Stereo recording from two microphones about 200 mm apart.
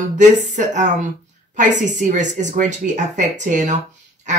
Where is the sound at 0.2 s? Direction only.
40° right (ahead or behind).